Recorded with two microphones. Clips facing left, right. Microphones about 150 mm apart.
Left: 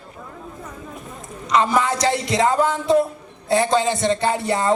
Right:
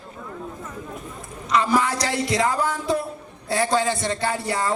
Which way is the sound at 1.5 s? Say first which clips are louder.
Left 2 dB; 25° left (ahead or behind).